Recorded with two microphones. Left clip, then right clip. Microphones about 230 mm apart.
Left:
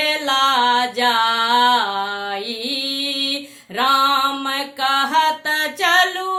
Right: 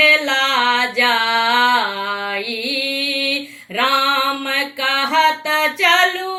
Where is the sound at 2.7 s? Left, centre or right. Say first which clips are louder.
Right 3 dB; left.